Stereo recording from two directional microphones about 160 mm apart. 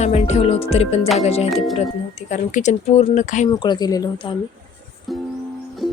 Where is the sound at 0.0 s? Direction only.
40° left (ahead or behind).